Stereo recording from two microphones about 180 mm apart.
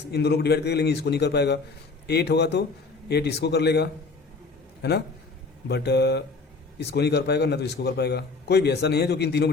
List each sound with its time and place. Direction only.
0.1 s a man's voice: 65° left (ahead or behind)